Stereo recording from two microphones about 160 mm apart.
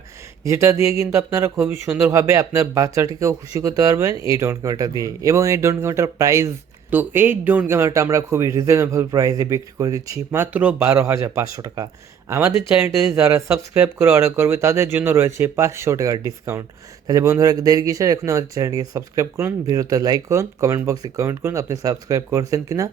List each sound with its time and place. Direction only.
0.4 s speech: 15° right (ahead or behind)